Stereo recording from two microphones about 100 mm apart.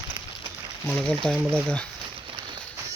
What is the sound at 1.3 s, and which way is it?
Speech, 25° right (ahead or behind).